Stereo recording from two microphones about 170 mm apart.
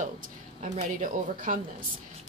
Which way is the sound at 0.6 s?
45° right (ahead or behind).